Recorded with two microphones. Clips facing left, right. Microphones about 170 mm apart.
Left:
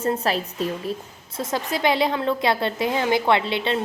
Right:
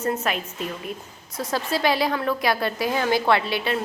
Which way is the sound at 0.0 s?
30° left (ahead or behind).